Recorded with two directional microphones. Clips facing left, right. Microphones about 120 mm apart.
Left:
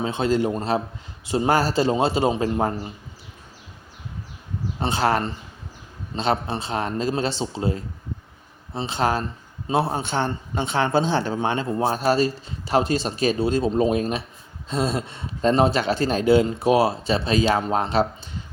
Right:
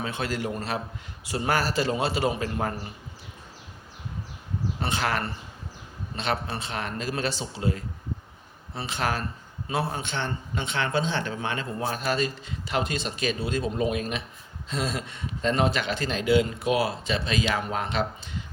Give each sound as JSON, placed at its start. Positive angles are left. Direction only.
{"t": 0.0, "sound": "a man's voice", "side_deg": 25}
{"t": 4.8, "sound": "a man's voice", "side_deg": 30}